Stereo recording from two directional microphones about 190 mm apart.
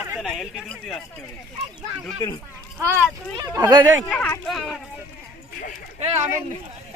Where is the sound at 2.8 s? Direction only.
15° right (ahead or behind).